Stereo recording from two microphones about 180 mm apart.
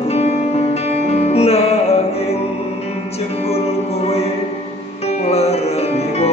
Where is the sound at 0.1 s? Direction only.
35° left (ahead or behind).